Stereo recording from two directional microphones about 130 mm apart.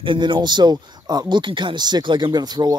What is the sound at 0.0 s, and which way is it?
Speech, 40° right (ahead or behind).